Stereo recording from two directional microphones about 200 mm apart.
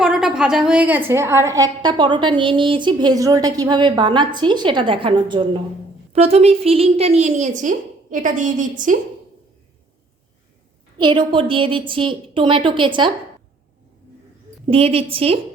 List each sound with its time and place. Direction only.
0.0 s a woman's voice: 5° right (ahead or behind); by 9.0 s 40° right (ahead or behind)
10.9 s a woman's voice: 25° right (ahead or behind)
14.7 s a woman's voice: 30° right (ahead or behind)